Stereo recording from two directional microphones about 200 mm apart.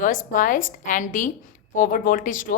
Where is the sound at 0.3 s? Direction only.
40° left (ahead or behind).